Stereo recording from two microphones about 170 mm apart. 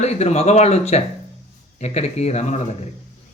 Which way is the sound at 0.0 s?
40° left (ahead or behind).